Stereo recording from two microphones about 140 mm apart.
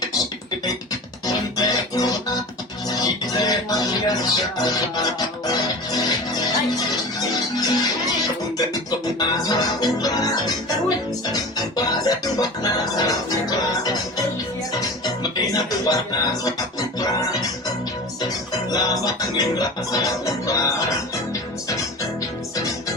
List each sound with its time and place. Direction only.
1.3 s music: 25° left (ahead or behind)
9.1 s music: 30° left (ahead or behind)
18.7 s music: 30° left (ahead or behind)